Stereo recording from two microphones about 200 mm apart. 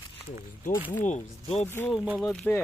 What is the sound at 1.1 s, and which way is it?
Speech, 35° left (ahead or behind).